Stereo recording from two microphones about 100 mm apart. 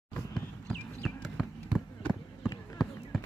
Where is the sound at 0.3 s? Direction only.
10° left (ahead or behind).